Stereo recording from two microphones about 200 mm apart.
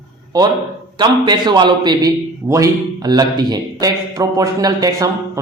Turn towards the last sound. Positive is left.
turn(degrees=-20)  # may be behind; listen again after turning